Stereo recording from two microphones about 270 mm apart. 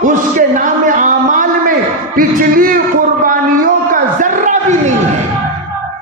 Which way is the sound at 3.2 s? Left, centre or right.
Right.